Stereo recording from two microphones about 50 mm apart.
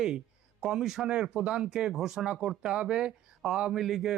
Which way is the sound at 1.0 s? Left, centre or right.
Centre.